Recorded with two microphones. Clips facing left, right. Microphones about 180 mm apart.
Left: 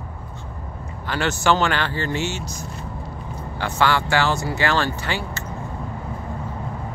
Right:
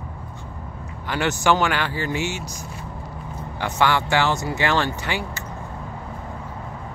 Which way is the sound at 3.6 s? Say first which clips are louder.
Even; 20° right (ahead or behind).